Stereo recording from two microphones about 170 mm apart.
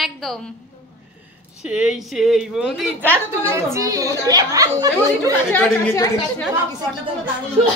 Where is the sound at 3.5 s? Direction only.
20° right (ahead or behind).